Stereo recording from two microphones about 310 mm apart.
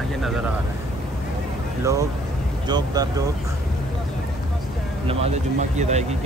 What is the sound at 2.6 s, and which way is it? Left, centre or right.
Speech, centre.